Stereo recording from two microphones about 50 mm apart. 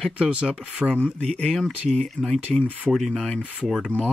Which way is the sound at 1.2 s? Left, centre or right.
Left.